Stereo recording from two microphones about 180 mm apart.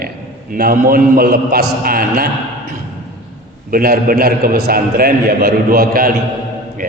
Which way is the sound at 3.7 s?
55° right (ahead or behind).